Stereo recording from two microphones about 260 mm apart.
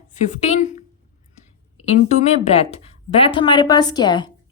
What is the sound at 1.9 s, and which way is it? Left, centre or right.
Speech, left.